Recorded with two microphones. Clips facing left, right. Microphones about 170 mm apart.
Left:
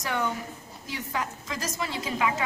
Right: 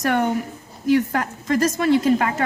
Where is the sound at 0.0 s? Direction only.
60° right (ahead or behind).